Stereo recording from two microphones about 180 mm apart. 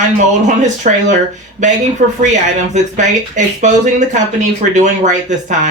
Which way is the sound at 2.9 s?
40° right (ahead or behind).